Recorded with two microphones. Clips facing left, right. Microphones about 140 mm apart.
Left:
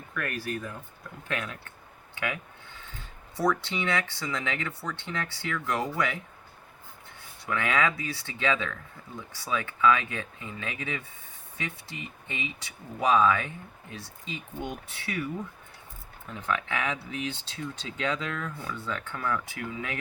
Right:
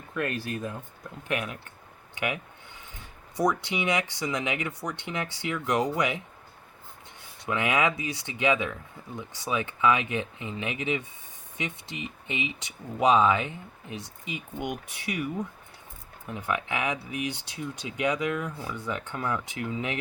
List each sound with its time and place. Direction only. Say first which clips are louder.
0.1 s speech: right 3 dB; 25° right (ahead or behind)
7.4 s speech: right 2 dB; 20° right (ahead or behind)